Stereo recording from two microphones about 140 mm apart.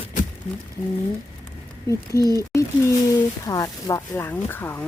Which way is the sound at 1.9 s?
25° left (ahead or behind).